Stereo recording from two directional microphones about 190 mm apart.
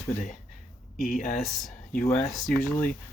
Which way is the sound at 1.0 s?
50° left (ahead or behind).